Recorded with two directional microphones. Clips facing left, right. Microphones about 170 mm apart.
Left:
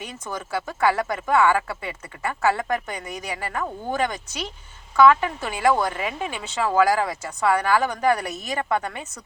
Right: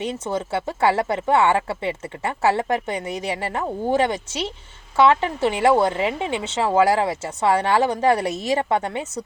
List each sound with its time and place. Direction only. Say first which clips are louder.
0.0 s speech: right 8 dB; 25° right (ahead or behind)